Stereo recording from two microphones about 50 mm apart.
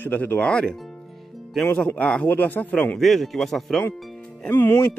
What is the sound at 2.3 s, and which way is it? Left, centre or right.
Speech, left.